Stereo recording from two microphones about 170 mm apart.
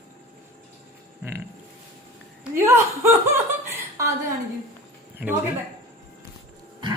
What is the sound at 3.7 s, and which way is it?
Chuckle, 20° right (ahead or behind).